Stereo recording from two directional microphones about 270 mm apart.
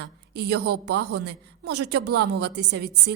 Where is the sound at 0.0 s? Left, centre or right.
Right.